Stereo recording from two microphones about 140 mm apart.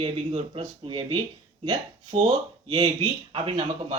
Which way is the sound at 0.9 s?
40° right (ahead or behind).